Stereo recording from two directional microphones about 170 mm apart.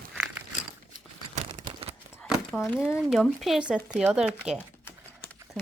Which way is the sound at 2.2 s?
5° left (ahead or behind).